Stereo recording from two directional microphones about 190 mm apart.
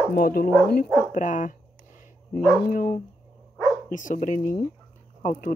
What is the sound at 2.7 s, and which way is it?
Speech, 45° left (ahead or behind).